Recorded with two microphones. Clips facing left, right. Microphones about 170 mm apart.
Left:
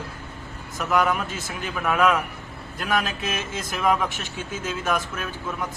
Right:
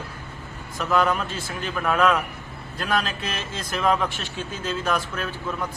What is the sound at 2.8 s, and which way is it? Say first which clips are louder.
Speech: even; 20° left (ahead or behind).